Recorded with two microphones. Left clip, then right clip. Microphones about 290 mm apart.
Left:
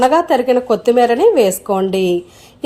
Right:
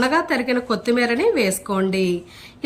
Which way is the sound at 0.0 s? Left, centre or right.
Centre.